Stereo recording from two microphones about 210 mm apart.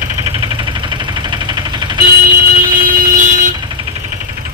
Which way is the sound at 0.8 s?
20° right (ahead or behind).